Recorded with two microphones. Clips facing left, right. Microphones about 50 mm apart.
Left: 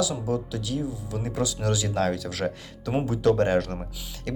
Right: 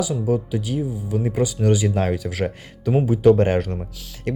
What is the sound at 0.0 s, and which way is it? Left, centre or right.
Speech, right.